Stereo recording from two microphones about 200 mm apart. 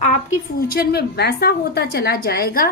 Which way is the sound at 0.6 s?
50° left (ahead or behind).